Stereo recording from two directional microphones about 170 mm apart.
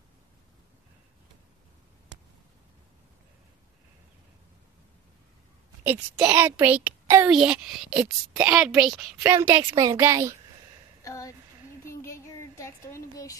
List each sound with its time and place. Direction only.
5.9 s a child's voice: 10° right (ahead or behind)
9.2 s a woman's voice: 15° right (ahead or behind)
11.1 s a sound: 20° left (ahead or behind)